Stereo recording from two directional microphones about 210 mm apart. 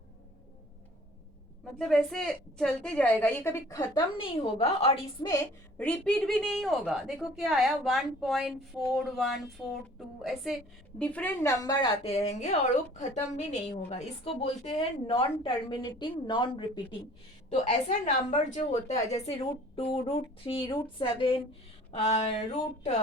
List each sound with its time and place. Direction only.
1.8 s a woman's voice: centre (ahead or behind); by 4.9 s 25° left (ahead or behind)
5.3 s a woman's voice: 10° left (ahead or behind)
11.6 s a woman's voice: 20° left (ahead or behind)
12.0 s a woman's voice: 30° left (ahead or behind)
17.5 s a woman's voice: 35° left (ahead or behind)